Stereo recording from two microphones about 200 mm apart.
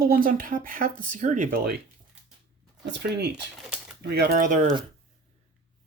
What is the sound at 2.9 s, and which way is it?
Speech, 60° right (ahead or behind).